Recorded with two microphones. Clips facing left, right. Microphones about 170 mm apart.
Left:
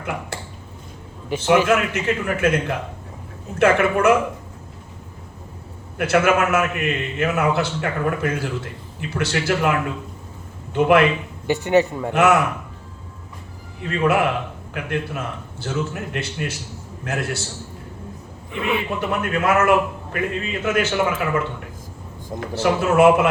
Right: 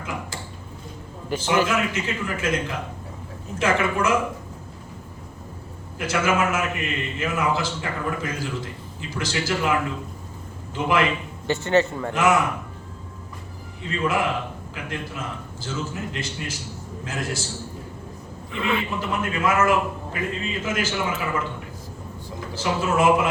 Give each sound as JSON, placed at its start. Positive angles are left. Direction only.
{"t": 0.0, "sound": "a man's voice", "side_deg": 65}
{"t": 1.6, "sound": "a man's voice", "side_deg": 65}
{"t": 6.0, "sound": "a man's voice", "side_deg": 65}
{"t": 11.4, "sound": "speech", "side_deg": 15}
{"t": 12.1, "sound": "a man's voice", "side_deg": 65}
{"t": 13.8, "sound": "a man's voice", "side_deg": 65}
{"t": 18.5, "sound": "speech", "side_deg": 10}
{"t": 18.9, "sound": "a man's voice", "side_deg": 65}